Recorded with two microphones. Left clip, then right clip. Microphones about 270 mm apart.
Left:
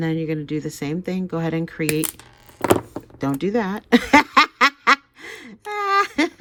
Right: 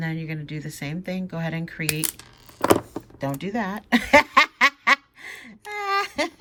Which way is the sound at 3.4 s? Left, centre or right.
Centre.